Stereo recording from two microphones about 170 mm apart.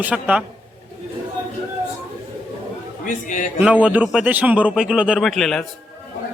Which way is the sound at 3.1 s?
50° left (ahead or behind).